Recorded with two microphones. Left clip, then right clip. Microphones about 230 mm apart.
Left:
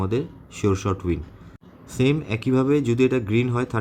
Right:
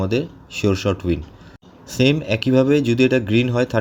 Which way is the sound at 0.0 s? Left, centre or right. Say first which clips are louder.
Right 4 dB; centre.